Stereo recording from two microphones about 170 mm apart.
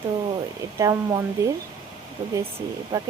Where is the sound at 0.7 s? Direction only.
15° right (ahead or behind).